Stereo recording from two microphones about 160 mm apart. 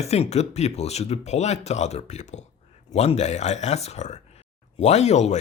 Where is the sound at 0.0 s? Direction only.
40° left (ahead or behind).